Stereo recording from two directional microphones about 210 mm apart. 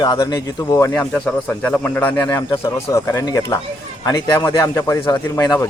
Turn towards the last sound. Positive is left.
turn(degrees=15)  # may be behind; listen again after turning